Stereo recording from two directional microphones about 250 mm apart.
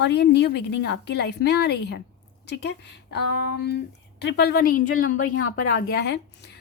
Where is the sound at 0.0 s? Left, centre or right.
Left.